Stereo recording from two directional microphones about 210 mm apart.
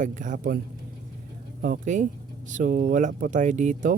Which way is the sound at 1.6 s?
40° right (ahead or behind).